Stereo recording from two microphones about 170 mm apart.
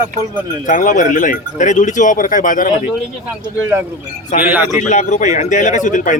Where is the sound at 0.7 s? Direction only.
50° left (ahead or behind).